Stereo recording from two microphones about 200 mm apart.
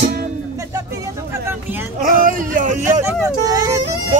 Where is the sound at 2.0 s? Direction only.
45° right (ahead or behind).